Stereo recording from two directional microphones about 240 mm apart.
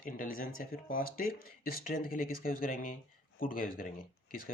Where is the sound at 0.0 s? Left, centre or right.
Left.